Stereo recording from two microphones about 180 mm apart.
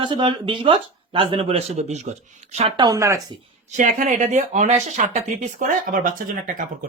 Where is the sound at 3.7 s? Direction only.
45° right (ahead or behind).